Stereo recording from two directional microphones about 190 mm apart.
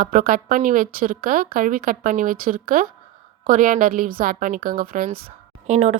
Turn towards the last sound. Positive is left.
turn(degrees=-35)  # may be behind; listen again after turning